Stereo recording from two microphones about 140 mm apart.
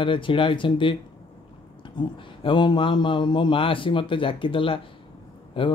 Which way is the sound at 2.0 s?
35° left (ahead or behind).